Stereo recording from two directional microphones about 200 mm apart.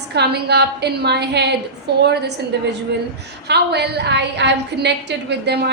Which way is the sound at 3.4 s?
55° right (ahead or behind).